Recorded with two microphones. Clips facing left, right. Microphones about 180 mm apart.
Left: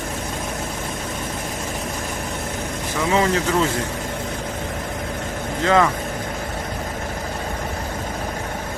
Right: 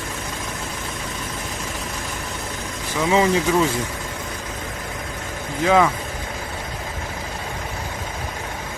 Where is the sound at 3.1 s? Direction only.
15° right (ahead or behind).